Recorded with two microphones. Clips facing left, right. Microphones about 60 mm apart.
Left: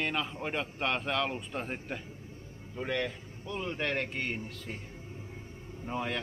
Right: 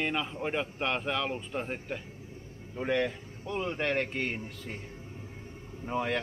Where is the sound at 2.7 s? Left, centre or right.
Centre.